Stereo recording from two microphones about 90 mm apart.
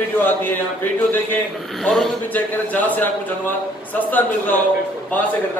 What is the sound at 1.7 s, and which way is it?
Speech, 5° left (ahead or behind).